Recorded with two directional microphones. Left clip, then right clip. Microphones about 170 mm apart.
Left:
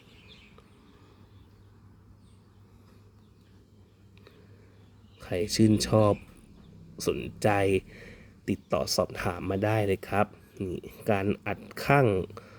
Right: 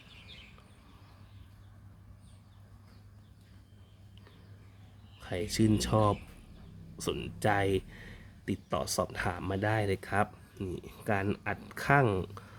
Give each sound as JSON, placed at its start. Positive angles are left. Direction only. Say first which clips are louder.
{"t": 5.2, "sound": "speech", "louder": "left 5 dB", "side_deg": 25}